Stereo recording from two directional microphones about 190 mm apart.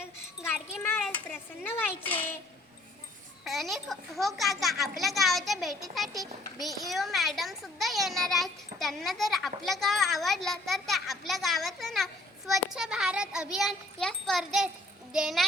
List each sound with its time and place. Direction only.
0.4 s wind chime: 10° left (ahead or behind)
1.0 s a child's voice: 10° left (ahead or behind)
3.4 s a child's voice: centre (ahead or behind)